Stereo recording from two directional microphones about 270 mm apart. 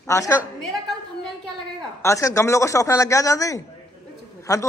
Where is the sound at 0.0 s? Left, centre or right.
Centre.